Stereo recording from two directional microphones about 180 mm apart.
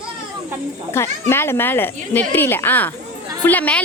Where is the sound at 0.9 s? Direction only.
15° left (ahead or behind).